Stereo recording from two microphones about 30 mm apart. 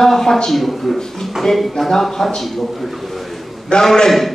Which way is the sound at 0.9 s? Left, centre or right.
Centre.